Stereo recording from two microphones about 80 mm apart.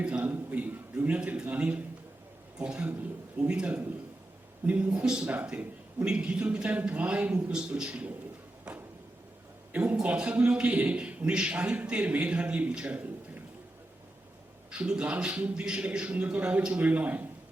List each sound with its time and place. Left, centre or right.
0.0 s a man's voice: centre
9.7 s a man's voice: centre
14.7 s a man's voice: centre